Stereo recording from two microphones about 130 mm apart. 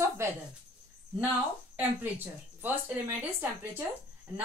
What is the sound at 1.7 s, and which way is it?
A woman's voice, 15° right (ahead or behind).